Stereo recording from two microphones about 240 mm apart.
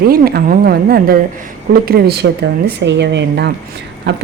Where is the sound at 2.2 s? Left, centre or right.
Right.